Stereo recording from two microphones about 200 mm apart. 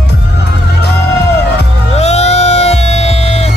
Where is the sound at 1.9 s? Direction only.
35° left (ahead or behind).